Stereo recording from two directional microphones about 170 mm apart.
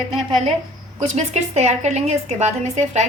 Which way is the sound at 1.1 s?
40° right (ahead or behind).